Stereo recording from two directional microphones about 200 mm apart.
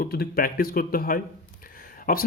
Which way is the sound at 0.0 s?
50° left (ahead or behind).